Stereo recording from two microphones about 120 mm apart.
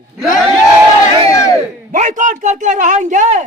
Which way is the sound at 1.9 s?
90° right.